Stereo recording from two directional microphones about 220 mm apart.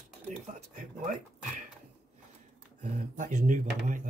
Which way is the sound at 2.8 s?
35° right (ahead or behind).